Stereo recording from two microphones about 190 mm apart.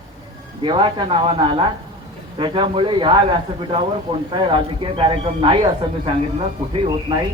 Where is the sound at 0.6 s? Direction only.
25° right (ahead or behind).